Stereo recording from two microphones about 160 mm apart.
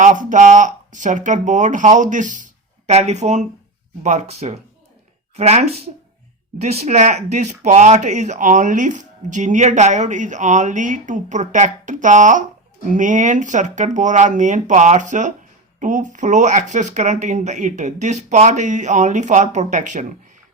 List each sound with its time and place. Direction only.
0.0 s speech: 50° right (ahead or behind)